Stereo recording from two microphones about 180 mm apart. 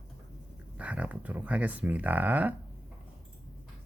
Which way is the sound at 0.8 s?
5° right (ahead or behind).